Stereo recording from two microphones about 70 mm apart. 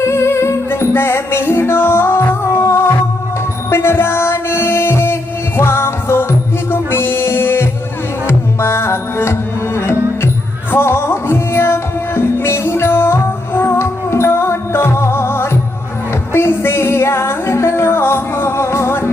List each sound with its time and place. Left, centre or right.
0.0 s music: left